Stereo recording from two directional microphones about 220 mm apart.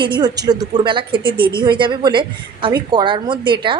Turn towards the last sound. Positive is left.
turn(degrees=-20)  # may be behind; listen again after turning